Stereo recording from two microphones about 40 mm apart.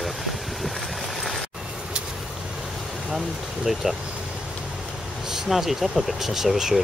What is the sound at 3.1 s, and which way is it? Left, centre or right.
Speech, centre.